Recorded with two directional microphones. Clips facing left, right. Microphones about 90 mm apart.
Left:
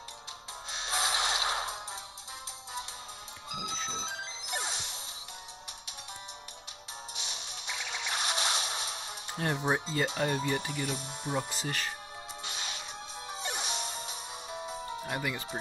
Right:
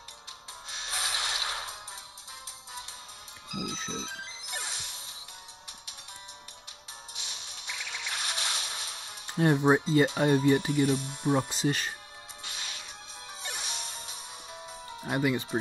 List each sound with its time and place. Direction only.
0.7 s music: 25° left (ahead or behind)
3.4 s music: 25° left (ahead or behind)
7.2 s music: 25° left (ahead or behind)
9.4 s speech: 25° right (ahead or behind)
12.4 s music: 25° left (ahead or behind)
15.0 s speech: 20° right (ahead or behind)